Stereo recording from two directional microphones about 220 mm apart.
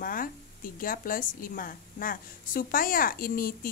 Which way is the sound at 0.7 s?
40° left (ahead or behind).